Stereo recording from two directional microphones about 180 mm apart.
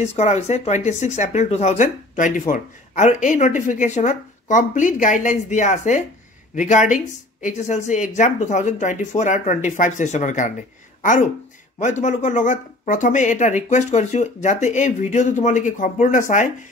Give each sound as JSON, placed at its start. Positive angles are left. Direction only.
{"t": 0.0, "sound": "speech", "side_deg": 35}